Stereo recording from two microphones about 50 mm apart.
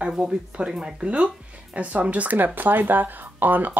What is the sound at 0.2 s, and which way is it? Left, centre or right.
Speech, right.